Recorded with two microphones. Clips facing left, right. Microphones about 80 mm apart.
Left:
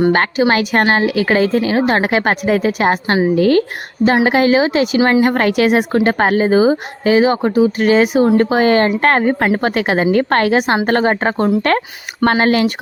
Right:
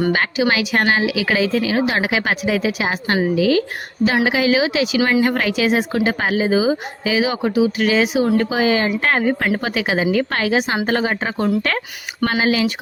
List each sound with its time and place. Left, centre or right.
0.1 s a woman's voice: left
4.0 s a woman's voice: left
4.9 s a woman's voice: left
5.2 s a woman's voice: left